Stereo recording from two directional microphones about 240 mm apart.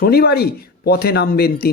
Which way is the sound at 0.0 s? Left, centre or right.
Left.